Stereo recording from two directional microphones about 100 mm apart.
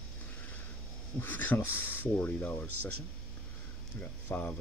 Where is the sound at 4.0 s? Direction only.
15° left (ahead or behind).